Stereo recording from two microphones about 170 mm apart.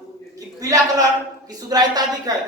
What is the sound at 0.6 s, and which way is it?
A man's voice, 20° right (ahead or behind).